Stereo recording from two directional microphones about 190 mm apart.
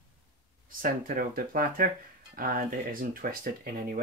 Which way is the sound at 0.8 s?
50° right (ahead or behind).